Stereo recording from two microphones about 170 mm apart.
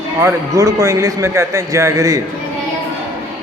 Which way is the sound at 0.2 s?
20° right (ahead or behind).